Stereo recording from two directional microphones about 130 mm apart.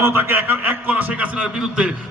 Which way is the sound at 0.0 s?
15° right (ahead or behind).